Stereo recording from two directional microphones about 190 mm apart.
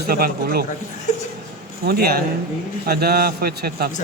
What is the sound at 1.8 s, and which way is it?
A man's voice, 55° right (ahead or behind).